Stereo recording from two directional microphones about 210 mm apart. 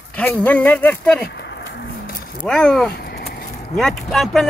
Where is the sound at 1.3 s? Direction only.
55° left (ahead or behind).